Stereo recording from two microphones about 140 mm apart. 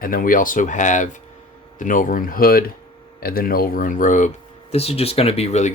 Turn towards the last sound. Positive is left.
turn(degrees=50)  # may be behind; listen again after turning